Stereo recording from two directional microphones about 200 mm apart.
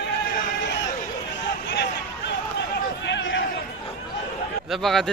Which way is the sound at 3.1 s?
70° left (ahead or behind).